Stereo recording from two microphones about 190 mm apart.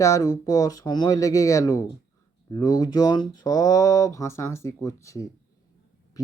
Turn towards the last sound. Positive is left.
turn(degrees=15)  # may be behind; listen again after turning